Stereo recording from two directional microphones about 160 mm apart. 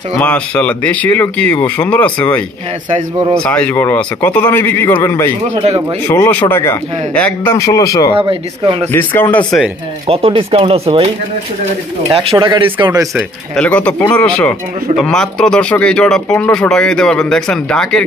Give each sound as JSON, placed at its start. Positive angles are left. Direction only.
{"t": 0.2, "sound": "speech", "side_deg": 10}
{"t": 8.2, "sound": "speech", "side_deg": -35}
{"t": 8.9, "sound": "speech", "side_deg": 10}
{"t": 10.0, "sound": "speech", "side_deg": -35}
{"t": 12.1, "sound": "speech", "side_deg": -35}
{"t": 13.1, "sound": "speech", "side_deg": 10}